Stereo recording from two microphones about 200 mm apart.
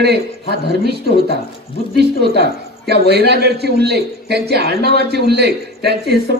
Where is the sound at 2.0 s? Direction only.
55° right (ahead or behind).